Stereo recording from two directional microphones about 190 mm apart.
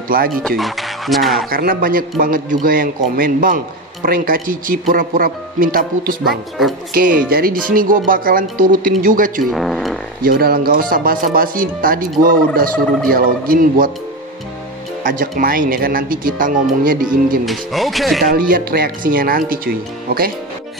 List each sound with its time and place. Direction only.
0.4 s speech: centre (ahead or behind)
1.5 s a man's voice: 50° right (ahead or behind)
9.5 s speech: centre (ahead or behind)
10.2 s a man's voice: 50° right (ahead or behind)
15.0 s a man's voice: 45° right (ahead or behind)
17.5 s speech: centre (ahead or behind)
18.2 s a man's voice: 50° right (ahead or behind)